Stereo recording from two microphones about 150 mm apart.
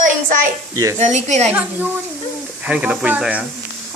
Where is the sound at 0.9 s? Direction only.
50° right (ahead or behind).